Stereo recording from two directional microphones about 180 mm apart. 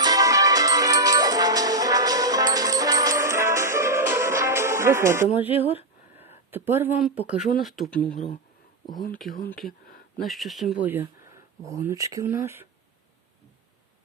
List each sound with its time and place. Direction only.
0.0 s music: 20° right (ahead or behind)
5.5 s speech: 30° left (ahead or behind)
6.1 s a sound: 10° right (ahead or behind)
7.0 s speech: centre (ahead or behind)
9.5 s speech: centre (ahead or behind)
9.8 s a sound: 55° left (ahead or behind)
10.2 s speech: centre (ahead or behind)